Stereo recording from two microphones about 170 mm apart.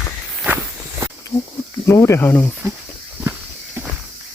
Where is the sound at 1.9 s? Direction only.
15° left (ahead or behind).